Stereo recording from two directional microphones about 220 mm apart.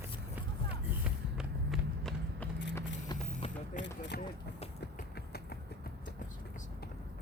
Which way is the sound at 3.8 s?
50° left (ahead or behind).